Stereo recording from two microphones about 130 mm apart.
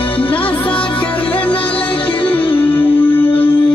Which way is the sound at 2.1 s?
10° left (ahead or behind).